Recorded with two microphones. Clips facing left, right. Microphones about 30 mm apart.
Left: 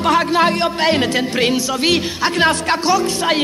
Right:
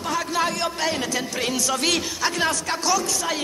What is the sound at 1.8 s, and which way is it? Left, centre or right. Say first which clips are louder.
Speech: left 6 dB; left.